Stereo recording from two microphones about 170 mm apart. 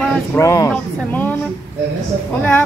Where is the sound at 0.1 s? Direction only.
15° left (ahead or behind).